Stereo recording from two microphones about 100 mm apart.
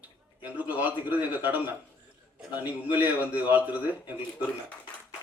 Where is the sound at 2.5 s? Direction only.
15° right (ahead or behind).